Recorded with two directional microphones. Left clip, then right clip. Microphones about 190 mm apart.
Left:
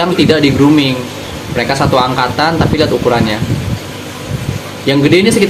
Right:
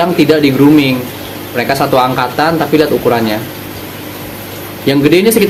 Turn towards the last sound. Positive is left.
turn(degrees=-20)  # may be behind; listen again after turning